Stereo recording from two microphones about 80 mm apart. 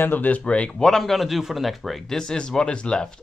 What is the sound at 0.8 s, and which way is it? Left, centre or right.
A man's voice, centre.